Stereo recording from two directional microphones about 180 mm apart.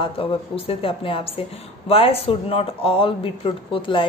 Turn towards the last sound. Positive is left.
turn(degrees=30)  # may be behind; listen again after turning